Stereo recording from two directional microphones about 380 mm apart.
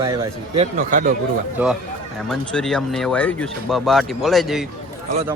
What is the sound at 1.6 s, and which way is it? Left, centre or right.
Speech, centre.